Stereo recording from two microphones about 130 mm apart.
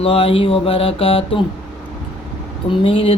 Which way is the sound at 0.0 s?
50° left (ahead or behind).